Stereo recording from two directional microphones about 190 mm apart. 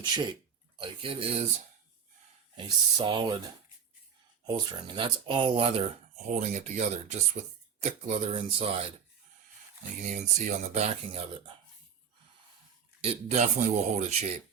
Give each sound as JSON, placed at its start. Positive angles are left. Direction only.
{"t": 0.0, "sound": "speech", "side_deg": -25}
{"t": 2.6, "sound": "speech", "side_deg": -25}
{"t": 4.4, "sound": "speech", "side_deg": -25}
{"t": 10.0, "sound": "speech", "side_deg": -40}
{"t": 13.0, "sound": "speech", "side_deg": -35}